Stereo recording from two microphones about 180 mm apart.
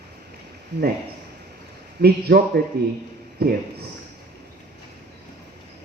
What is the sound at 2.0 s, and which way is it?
Speech, 60° right (ahead or behind).